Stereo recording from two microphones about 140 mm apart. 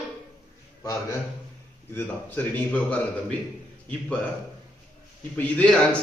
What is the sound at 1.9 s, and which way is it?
A man's voice, 15° left (ahead or behind).